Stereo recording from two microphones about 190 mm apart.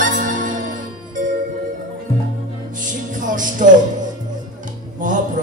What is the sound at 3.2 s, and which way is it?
Music, 45° right (ahead or behind).